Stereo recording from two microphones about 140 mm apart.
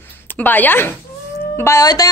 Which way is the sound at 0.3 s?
15° left (ahead or behind).